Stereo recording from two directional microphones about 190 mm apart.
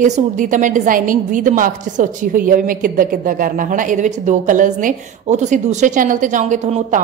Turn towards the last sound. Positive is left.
turn(degrees=-40)  # may be behind; listen again after turning